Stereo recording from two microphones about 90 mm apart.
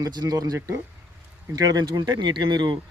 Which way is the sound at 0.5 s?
30° right (ahead or behind).